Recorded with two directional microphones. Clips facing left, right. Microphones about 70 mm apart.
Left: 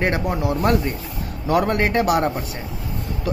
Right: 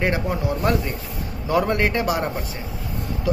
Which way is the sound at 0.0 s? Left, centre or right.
Left.